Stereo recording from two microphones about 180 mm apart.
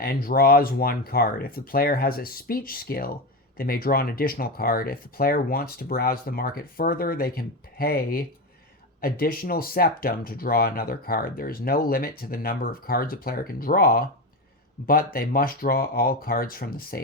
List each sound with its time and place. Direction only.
0.0 s speech: 55° left (ahead or behind)